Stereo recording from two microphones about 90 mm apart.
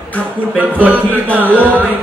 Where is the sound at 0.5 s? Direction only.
20° right (ahead or behind).